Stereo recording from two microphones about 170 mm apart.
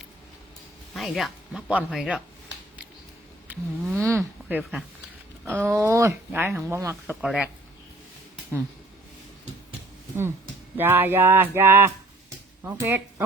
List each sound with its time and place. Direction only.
0.9 s speech: centre (ahead or behind)
3.4 s a sound: 10° right (ahead or behind)
4.2 s speech: 5° right (ahead or behind)
7.1 s speech: 5° right (ahead or behind)
10.8 s speech: 10° right (ahead or behind)